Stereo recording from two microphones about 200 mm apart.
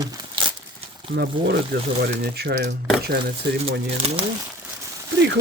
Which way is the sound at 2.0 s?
50° right (ahead or behind).